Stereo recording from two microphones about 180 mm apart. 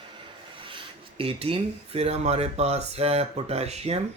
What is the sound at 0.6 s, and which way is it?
Speech, 30° right (ahead or behind).